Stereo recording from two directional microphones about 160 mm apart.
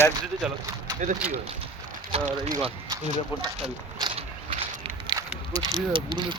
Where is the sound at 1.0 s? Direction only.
45° right (ahead or behind).